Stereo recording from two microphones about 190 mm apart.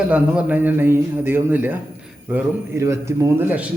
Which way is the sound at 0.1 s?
10° right (ahead or behind).